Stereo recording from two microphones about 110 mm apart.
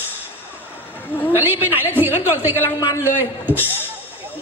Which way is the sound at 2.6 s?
35° left (ahead or behind).